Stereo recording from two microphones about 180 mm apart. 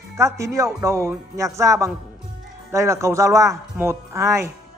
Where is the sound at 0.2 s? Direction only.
15° right (ahead or behind).